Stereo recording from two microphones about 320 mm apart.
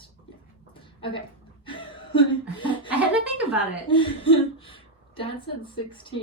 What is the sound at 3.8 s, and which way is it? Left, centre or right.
A woman's voice, centre.